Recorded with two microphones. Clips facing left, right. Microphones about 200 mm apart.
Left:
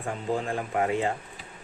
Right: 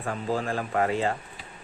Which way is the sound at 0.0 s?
15° left (ahead or behind).